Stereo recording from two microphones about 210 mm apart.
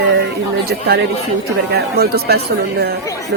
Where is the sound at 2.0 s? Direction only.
50° right (ahead or behind).